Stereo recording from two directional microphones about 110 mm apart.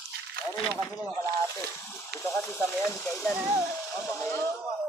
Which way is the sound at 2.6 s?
20° left (ahead or behind).